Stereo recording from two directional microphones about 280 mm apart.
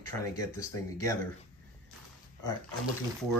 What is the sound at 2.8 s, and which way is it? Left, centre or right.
Speech, centre.